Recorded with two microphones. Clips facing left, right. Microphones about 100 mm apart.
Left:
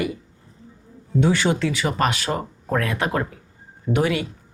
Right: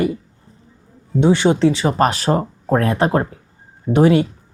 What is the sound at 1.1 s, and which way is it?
Speech, 25° right (ahead or behind).